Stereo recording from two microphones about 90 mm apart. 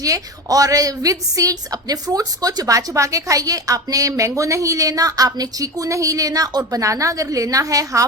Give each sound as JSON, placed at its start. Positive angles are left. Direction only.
{"t": 0.0, "sound": "a woman's voice", "side_deg": -40}